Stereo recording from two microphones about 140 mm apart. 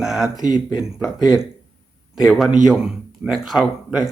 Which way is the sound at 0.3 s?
25° left (ahead or behind).